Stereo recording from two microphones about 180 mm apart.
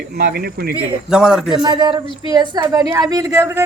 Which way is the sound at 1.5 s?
25° right (ahead or behind).